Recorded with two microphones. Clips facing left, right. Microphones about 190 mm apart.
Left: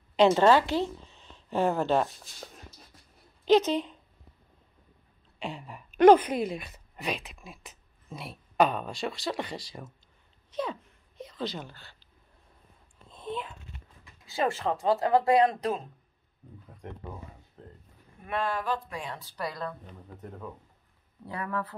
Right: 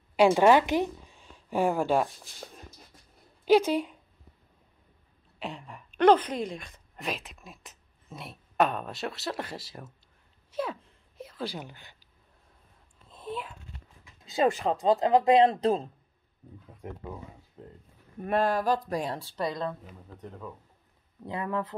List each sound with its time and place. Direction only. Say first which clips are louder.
0.1 s speech: right 1 dB; 10° right (ahead or behind)
5.4 s speech: left 1 dB; centre (ahead or behind)
10.5 s a sound: even; 5° right (ahead or behind)
13.1 s a sound: left 1 dB; 5° right (ahead or behind)
14.2 s speech: right 3 dB; 20° right (ahead or behind)
16.6 s speech: right 2 dB; 5° right (ahead or behind)
18.2 s speech: right 5 dB; 40° right (ahead or behind); by 19.7 s 20° right (ahead or behind)
20.2 s speech: even; 5° left (ahead or behind)
21.3 s speech: right 2 dB; 20° right (ahead or behind)